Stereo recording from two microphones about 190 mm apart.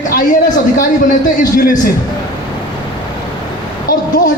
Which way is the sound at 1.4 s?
45° left (ahead or behind).